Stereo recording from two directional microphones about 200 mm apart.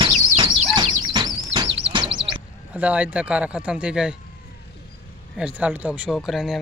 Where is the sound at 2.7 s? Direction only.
5° right (ahead or behind).